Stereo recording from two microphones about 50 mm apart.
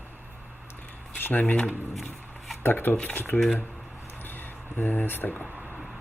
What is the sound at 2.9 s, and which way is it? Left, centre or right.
Speech, left.